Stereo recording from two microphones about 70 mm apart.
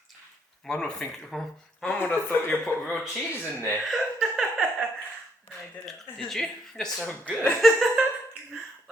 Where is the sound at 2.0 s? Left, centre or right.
Left.